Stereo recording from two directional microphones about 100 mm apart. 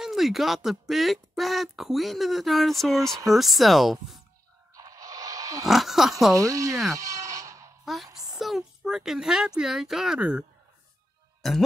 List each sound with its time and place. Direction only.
0.0 s speech: 5° right (ahead or behind)
4.7 s a sound: 35° right (ahead or behind)
5.7 s speech: centre (ahead or behind)
6.3 s speech: 35° right (ahead or behind)
6.9 s a sound: 35° right (ahead or behind)
7.8 s a woman's voice: centre (ahead or behind)
11.4 s speech: 5° left (ahead or behind)